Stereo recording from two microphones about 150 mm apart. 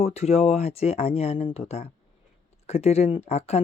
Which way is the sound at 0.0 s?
45° left (ahead or behind).